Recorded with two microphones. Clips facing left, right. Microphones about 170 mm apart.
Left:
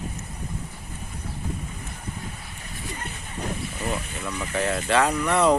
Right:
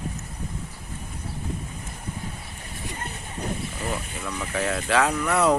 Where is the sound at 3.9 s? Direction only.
Centre (ahead or behind).